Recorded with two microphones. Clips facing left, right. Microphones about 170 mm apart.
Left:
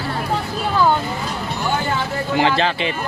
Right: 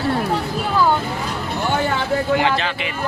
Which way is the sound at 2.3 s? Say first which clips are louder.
Left 2 dB; 35° left (ahead or behind).